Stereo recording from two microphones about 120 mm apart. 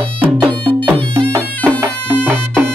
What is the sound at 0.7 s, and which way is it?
Music, 45° right (ahead or behind).